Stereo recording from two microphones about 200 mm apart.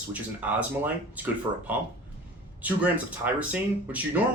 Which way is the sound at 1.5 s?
20° right (ahead or behind).